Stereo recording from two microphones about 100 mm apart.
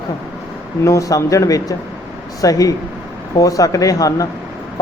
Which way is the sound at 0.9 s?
35° left (ahead or behind).